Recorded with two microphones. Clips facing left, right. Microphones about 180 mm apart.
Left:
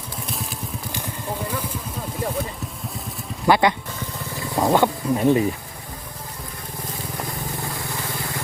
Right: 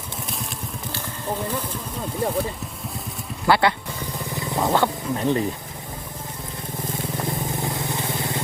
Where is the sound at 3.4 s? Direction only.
15° left (ahead or behind).